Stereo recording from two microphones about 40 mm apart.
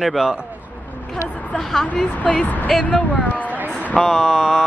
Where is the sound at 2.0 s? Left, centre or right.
Left.